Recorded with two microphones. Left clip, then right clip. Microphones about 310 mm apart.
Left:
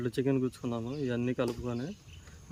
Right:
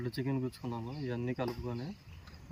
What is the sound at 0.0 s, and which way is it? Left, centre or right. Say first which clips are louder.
Speech: left 7 dB; centre.